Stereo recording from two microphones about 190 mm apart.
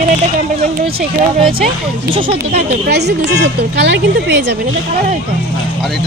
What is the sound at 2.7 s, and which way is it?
Speech, 60° right (ahead or behind).